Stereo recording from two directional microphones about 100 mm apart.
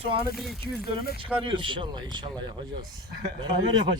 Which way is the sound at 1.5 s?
55° right (ahead or behind).